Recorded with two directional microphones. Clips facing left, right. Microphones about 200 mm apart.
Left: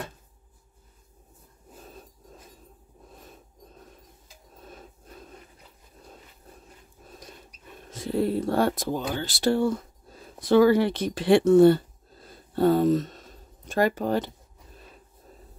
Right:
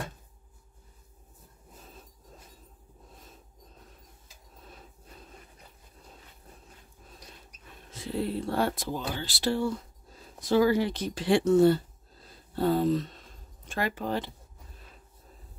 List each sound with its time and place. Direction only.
7.9 s speech: 45° left (ahead or behind)
10.5 s speech: 60° left (ahead or behind); by 14.3 s 45° left (ahead or behind)